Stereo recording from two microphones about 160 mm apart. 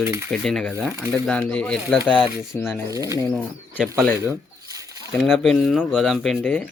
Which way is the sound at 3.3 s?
10° left (ahead or behind).